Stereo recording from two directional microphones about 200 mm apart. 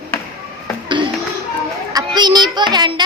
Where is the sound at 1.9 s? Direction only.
20° right (ahead or behind).